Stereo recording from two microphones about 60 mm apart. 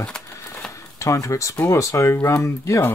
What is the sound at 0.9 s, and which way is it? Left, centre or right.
Speech, left.